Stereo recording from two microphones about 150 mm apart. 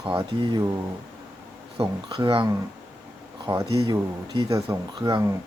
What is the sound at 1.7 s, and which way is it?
Speech, 25° right (ahead or behind).